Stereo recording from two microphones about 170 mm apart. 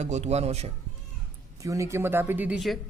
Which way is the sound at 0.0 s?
40° right (ahead or behind).